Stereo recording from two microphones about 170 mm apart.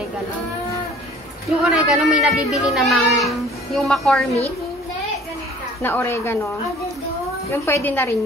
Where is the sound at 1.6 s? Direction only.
5° right (ahead or behind).